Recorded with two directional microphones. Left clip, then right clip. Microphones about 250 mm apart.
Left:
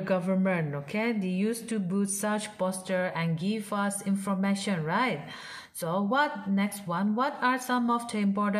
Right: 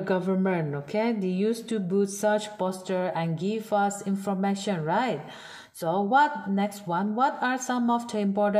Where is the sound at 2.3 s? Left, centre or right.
Centre.